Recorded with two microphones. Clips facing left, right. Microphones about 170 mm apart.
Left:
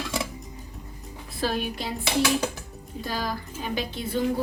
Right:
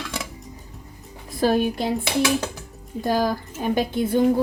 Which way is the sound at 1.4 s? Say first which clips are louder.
Right 8 dB; 50° right (ahead or behind).